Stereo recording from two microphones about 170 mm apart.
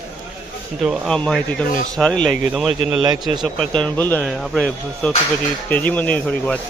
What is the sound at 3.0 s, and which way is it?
Speech, 25° right (ahead or behind).